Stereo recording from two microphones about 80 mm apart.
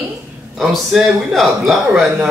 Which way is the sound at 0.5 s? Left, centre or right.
Centre.